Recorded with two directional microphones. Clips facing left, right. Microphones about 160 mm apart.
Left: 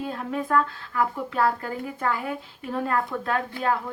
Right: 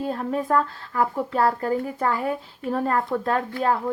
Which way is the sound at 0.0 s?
40° right (ahead or behind).